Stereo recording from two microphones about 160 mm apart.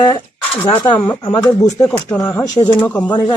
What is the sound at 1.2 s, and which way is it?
Speech, 25° left (ahead or behind).